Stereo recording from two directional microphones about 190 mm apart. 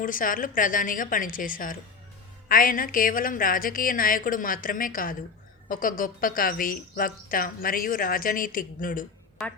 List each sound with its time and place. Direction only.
0.0 s a woman's voice: 45° left (ahead or behind)